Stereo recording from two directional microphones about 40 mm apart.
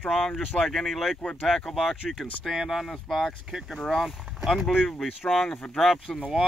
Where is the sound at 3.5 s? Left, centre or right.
Centre.